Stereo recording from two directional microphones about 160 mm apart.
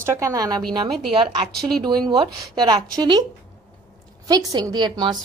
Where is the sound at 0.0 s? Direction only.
20° right (ahead or behind).